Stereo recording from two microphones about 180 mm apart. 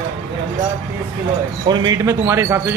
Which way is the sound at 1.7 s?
20° right (ahead or behind).